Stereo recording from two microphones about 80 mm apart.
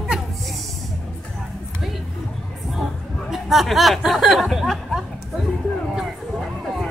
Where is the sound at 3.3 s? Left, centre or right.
Centre.